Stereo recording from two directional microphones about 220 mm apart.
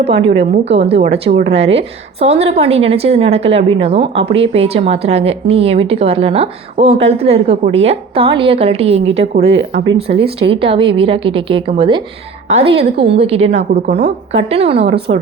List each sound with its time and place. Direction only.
0.0 s a woman's voice: 25° right (ahead or behind)
9.5 s speech: 55° right (ahead or behind)
9.9 s a woman's voice: 25° right (ahead or behind)